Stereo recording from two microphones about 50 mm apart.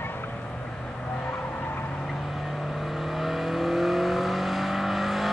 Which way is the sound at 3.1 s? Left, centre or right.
Centre.